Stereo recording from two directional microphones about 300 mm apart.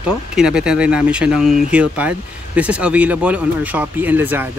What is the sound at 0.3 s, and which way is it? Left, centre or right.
Speech, centre.